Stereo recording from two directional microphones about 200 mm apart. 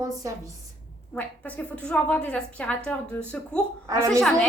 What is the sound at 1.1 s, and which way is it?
A woman's voice, 5° left (ahead or behind).